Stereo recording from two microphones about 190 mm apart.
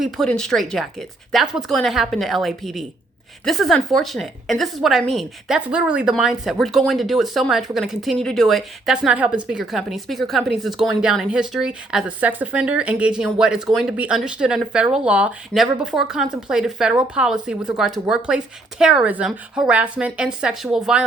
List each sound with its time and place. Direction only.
0.0 s a woman's voice: centre (ahead or behind)